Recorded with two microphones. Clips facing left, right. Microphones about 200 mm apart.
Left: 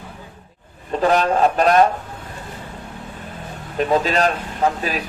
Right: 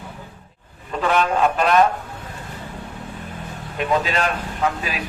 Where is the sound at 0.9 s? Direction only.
35° left (ahead or behind).